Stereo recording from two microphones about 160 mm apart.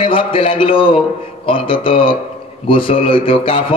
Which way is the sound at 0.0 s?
35° left (ahead or behind).